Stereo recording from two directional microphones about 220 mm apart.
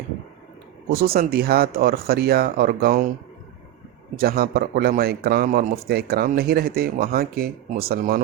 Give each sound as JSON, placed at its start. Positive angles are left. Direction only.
{"t": 0.9, "sound": "a man's voice", "side_deg": -45}
{"t": 4.2, "sound": "a man's voice", "side_deg": -45}